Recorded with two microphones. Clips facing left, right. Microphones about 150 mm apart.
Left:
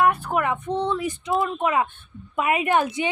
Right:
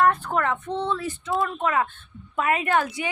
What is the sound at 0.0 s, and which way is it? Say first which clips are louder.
Speech: left 1 dB; 10° left (ahead or behind).